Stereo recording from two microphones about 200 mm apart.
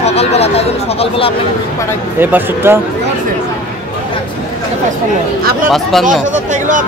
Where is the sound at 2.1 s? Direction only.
10° right (ahead or behind).